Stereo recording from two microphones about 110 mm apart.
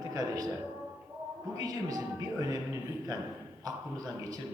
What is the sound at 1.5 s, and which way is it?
A man's voice, 35° right (ahead or behind).